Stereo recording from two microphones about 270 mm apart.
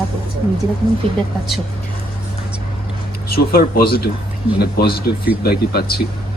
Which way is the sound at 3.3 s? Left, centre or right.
Left.